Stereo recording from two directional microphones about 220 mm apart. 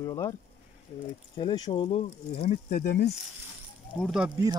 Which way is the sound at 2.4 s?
40° left (ahead or behind).